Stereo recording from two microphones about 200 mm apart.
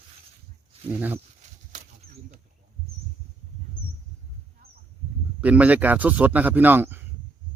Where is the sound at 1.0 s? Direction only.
10° right (ahead or behind).